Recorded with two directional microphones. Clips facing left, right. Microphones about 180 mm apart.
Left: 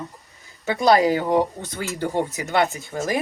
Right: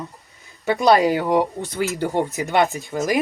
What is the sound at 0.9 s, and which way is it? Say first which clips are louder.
Speech: right 1 dB; 15° right (ahead or behind).